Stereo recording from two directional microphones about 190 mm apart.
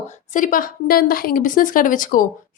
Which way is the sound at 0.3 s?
45° left (ahead or behind).